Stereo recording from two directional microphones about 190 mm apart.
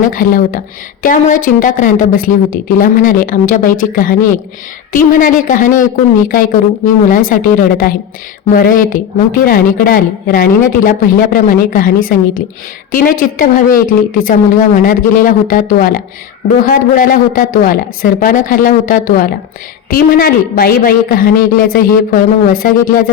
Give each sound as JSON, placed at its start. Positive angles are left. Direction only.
{"t": 0.1, "sound": "a woman's voice", "side_deg": 45}